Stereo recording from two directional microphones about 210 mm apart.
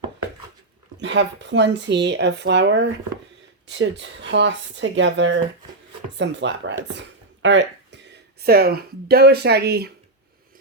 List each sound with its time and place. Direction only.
0.9 s speech: 55° right (ahead or behind)